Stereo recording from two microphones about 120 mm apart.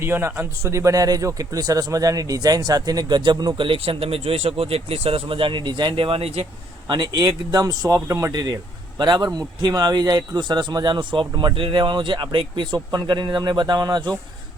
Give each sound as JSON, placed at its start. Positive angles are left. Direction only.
{"t": 0.0, "sound": "a man's voice", "side_deg": -20}
{"t": 6.8, "sound": "a man's voice", "side_deg": -35}